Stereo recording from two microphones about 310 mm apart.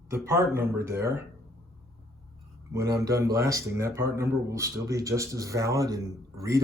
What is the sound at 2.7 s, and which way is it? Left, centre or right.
Speech, centre.